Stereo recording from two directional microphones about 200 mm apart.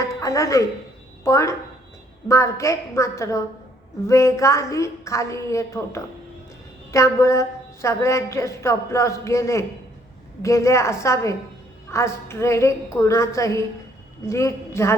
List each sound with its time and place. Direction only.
0.0 s music: 15° left (ahead or behind)
1.2 s a woman's voice: 15° left (ahead or behind)